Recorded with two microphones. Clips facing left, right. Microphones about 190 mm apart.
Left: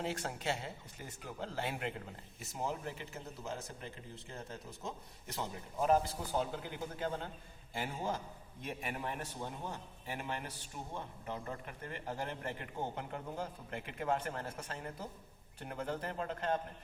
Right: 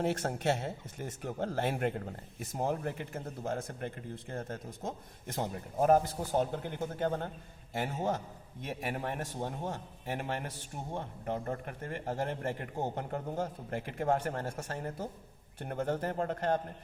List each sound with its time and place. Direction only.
0.0 s speech: 50° right (ahead or behind)